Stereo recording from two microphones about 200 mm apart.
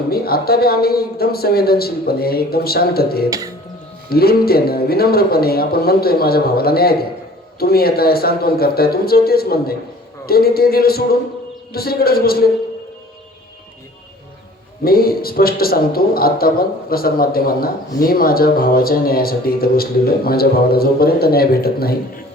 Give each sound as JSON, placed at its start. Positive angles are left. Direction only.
{"t": 0.1, "sound": "a man's voice", "side_deg": 50}
{"t": 3.2, "sound": "music", "side_deg": -15}
{"t": 4.1, "sound": "a man's voice", "side_deg": 50}
{"t": 14.8, "sound": "a man's voice", "side_deg": 50}